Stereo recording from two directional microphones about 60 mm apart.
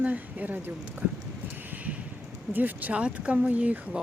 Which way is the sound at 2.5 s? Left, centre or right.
Right.